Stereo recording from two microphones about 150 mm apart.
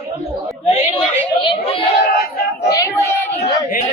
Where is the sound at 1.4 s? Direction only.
40° left (ahead or behind).